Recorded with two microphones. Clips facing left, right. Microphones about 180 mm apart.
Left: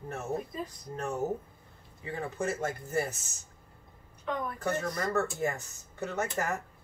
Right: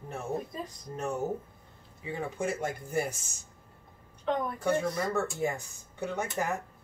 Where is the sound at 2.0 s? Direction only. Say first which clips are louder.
Right 1 dB; 15° right (ahead or behind).